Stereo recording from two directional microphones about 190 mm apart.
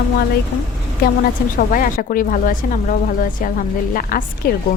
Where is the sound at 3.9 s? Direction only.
50° left (ahead or behind).